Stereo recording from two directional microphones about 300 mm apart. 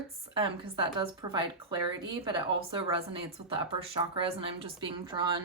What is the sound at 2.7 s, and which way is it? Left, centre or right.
Speech, centre.